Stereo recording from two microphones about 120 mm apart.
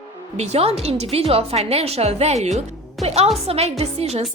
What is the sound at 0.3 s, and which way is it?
A woman's voice, 65° right (ahead or behind).